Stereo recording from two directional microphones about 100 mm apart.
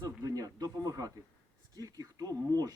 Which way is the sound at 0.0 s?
35° right (ahead or behind).